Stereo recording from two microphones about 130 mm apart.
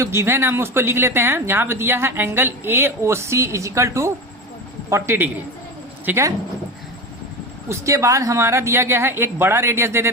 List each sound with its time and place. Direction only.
0.0 s speech: 20° right (ahead or behind)
7.7 s speech: 25° right (ahead or behind)